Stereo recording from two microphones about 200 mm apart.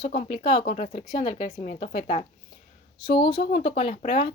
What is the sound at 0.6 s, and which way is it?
Speech, 40° left (ahead or behind).